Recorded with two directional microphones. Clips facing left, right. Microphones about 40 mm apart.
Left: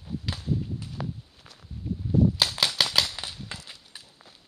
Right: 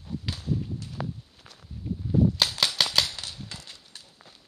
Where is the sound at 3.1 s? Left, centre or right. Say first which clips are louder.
Left 2 dB; centre.